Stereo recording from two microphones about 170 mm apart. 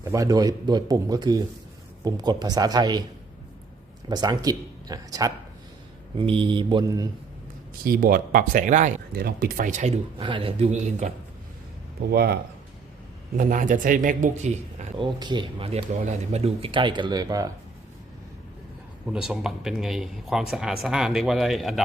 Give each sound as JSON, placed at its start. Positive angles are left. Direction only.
{"t": 0.0, "sound": "speech", "side_deg": -20}
{"t": 4.1, "sound": "speech", "side_deg": -25}
{"t": 7.9, "sound": "speech", "side_deg": -60}
{"t": 9.1, "sound": "speech", "side_deg": -60}
{"t": 10.2, "sound": "speech", "side_deg": -30}
{"t": 12.1, "sound": "speech", "side_deg": -65}
{"t": 13.3, "sound": "a man's voice", "side_deg": -50}
{"t": 14.9, "sound": "speech", "side_deg": -25}
{"t": 19.0, "sound": "speech", "side_deg": -5}